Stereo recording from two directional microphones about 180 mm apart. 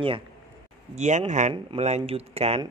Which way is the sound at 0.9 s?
40° right (ahead or behind).